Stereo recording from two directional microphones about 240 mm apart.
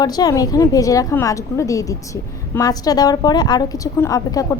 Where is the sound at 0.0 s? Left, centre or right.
Centre.